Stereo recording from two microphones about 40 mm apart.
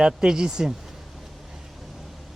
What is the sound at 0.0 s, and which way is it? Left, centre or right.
Speech, centre.